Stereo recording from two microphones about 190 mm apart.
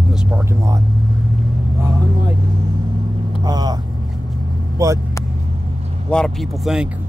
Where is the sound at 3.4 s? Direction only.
20° right (ahead or behind).